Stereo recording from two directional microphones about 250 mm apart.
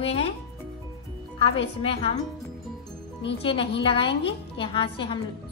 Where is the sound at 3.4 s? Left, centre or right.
Left.